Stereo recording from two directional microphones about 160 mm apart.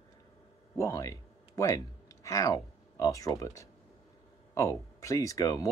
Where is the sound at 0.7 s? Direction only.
20° left (ahead or behind).